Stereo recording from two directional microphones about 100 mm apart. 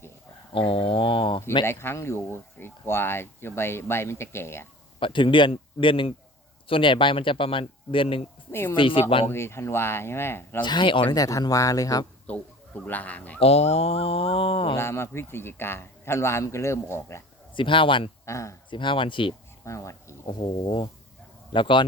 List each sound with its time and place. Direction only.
0.5 s speech: 65° left (ahead or behind)
1.6 s speech: 25° left (ahead or behind)
4.9 s speech: 55° left (ahead or behind)
9.3 s speech: 25° left (ahead or behind)
10.6 s speech: 50° left (ahead or behind)
11.1 s speech: 35° left (ahead or behind)
12.3 s speech: 15° left (ahead or behind)
13.4 s speech: 90° left; by 14.8 s 65° left (ahead or behind)
14.8 s speech: 25° left (ahead or behind)
17.5 s speech: 55° left (ahead or behind)
18.3 s speech: 30° left (ahead or behind)
18.7 s speech: 55° left (ahead or behind)
19.6 s speech: 30° left (ahead or behind)
20.2 s speech: 60° left (ahead or behind)